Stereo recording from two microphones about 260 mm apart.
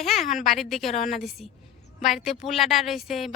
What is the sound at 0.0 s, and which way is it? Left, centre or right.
A woman's voice, centre.